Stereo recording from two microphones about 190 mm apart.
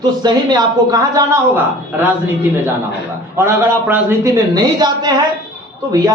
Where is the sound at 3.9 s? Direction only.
15° right (ahead or behind).